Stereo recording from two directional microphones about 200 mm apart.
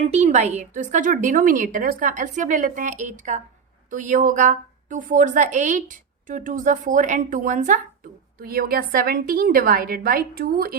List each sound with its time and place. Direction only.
0.0 s a woman's voice: 35° right (ahead or behind); by 10.8 s 50° right (ahead or behind)